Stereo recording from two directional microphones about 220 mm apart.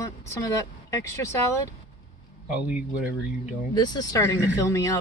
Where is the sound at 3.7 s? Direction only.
20° left (ahead or behind).